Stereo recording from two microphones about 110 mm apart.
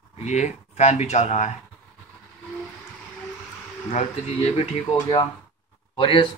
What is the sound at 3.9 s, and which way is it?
Speech, 90° left.